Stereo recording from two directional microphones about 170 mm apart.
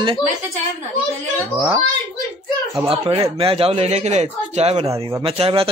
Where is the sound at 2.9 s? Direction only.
35° right (ahead or behind).